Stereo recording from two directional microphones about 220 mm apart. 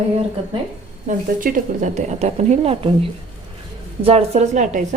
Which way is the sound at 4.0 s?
25° right (ahead or behind).